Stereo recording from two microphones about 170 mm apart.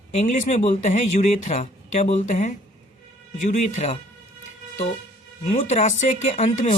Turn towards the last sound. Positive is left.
turn(degrees=45)  # may be behind; listen again after turning